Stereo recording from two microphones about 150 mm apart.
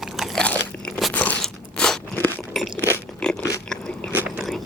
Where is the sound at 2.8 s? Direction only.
15° left (ahead or behind).